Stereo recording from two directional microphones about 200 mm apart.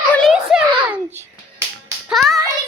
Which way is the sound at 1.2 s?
15° right (ahead or behind).